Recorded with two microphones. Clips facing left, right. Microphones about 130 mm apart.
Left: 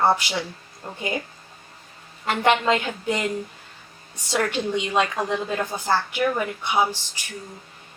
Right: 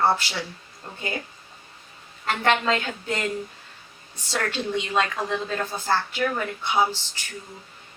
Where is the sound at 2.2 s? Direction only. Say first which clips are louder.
Left 2 dB; 15° left (ahead or behind).